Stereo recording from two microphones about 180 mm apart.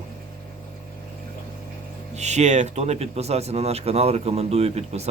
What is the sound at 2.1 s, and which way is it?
Speech, 40° right (ahead or behind).